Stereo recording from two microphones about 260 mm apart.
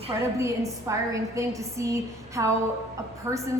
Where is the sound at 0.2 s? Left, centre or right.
Centre.